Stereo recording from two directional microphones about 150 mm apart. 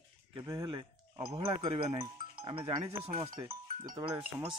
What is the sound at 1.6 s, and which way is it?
Speech, 40° right (ahead or behind).